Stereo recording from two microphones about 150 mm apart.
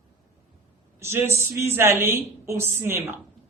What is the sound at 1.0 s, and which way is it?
A woman's voice, 15° right (ahead or behind).